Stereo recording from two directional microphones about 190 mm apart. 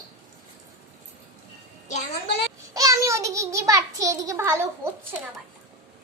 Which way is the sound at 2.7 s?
20° right (ahead or behind).